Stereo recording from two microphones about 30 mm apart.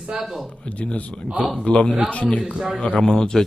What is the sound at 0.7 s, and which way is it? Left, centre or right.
A man's voice, left.